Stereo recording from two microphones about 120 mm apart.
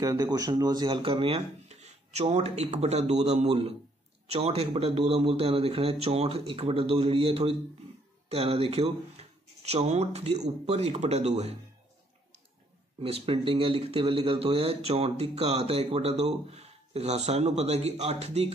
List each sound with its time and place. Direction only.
0.0 s speech: 30° right (ahead or behind); by 11.5 s 65° right (ahead or behind)
13.0 s speech: 55° right (ahead or behind)